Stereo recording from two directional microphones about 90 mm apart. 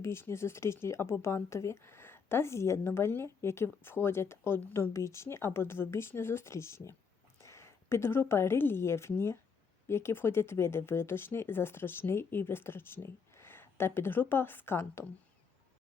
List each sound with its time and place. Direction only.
0.0 s a woman's voice: 30° left (ahead or behind)